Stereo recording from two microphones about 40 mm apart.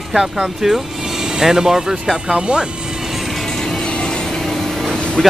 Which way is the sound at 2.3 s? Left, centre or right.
Right.